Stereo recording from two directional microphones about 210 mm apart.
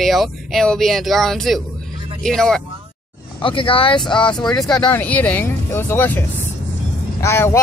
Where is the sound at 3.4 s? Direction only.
25° left (ahead or behind).